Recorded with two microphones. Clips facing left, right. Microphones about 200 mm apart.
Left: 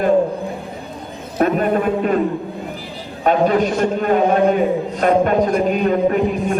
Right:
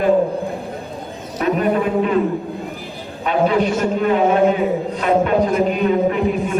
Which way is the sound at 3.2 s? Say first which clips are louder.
Left 1 dB; 45° left (ahead or behind).